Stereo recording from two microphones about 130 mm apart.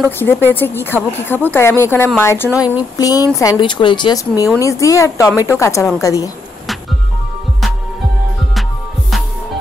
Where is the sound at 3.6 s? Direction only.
40° left (ahead or behind).